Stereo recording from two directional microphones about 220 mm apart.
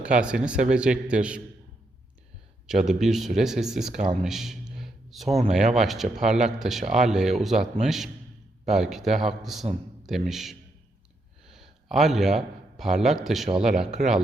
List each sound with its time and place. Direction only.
0.0 s speech: 5° right (ahead or behind)
2.6 s speech: centre (ahead or behind)
4.2 s a sound: centre (ahead or behind)
5.3 s speech: 30° right (ahead or behind)
5.5 s a man's voice: centre (ahead or behind)